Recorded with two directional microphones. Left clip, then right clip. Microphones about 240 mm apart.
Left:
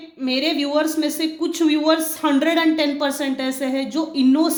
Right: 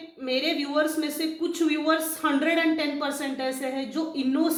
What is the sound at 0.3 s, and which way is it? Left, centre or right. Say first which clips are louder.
A woman's voice: left 5 dB; left.